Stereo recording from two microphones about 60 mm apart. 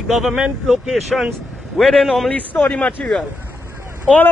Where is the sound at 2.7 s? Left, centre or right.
Left.